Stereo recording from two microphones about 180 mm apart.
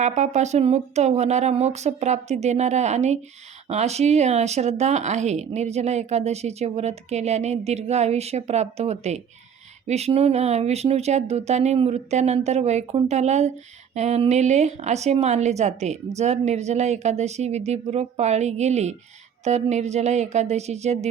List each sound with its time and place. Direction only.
0.0 s speech: 40° right (ahead or behind)